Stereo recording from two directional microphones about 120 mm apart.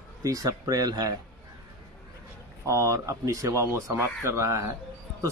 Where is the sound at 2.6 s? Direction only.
30° right (ahead or behind).